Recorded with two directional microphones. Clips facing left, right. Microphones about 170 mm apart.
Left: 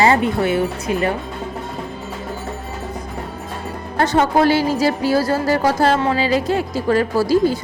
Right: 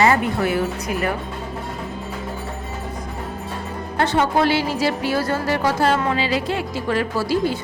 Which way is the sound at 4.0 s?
40° left (ahead or behind).